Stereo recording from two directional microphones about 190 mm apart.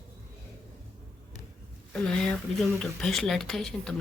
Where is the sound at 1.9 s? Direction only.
5° left (ahead or behind).